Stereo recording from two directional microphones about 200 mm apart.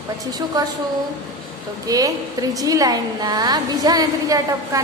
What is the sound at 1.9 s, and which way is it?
A woman's voice, 20° right (ahead or behind).